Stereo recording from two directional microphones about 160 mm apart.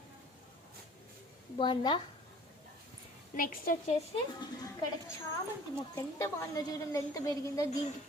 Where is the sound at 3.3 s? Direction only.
60° left (ahead or behind).